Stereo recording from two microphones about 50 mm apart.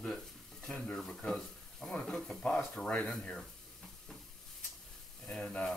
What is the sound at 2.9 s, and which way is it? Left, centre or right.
Speech, centre.